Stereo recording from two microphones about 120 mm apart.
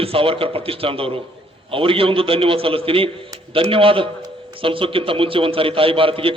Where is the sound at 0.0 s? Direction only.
50° right (ahead or behind).